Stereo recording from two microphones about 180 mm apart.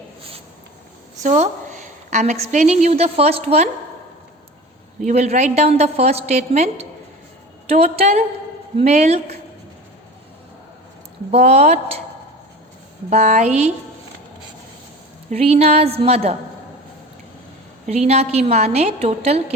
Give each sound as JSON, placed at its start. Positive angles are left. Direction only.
{"t": 1.2, "sound": "a woman's voice", "side_deg": -40}
{"t": 5.0, "sound": "a woman's voice", "side_deg": -40}
{"t": 11.3, "sound": "a woman's voice", "side_deg": -35}
{"t": 13.1, "sound": "a woman's voice", "side_deg": -35}
{"t": 15.3, "sound": "a woman's voice", "side_deg": -35}
{"t": 17.8, "sound": "a woman's voice", "side_deg": -40}